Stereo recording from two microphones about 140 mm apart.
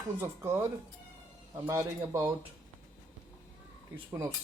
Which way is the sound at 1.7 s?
20° right (ahead or behind).